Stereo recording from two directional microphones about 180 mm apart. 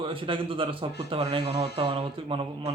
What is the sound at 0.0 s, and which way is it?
A man's voice, 30° right (ahead or behind).